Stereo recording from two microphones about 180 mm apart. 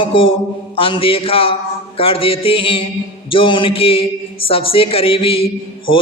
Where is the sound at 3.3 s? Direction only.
30° left (ahead or behind).